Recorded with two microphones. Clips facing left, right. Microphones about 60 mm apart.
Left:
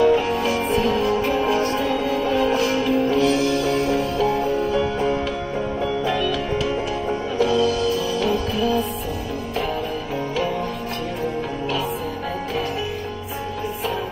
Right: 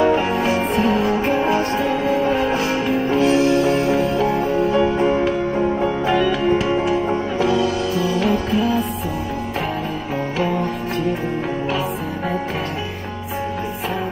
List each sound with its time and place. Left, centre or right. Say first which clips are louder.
0.0 s music: right 1 dB; right